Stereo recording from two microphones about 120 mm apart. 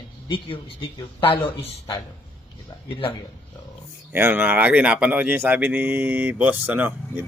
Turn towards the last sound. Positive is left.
turn(degrees=-15)  # may be behind; listen again after turning